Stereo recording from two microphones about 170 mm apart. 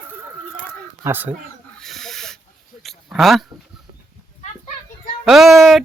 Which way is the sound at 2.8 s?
Centre (ahead or behind).